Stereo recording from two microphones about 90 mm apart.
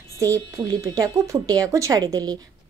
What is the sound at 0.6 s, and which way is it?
Speech, 40° right (ahead or behind).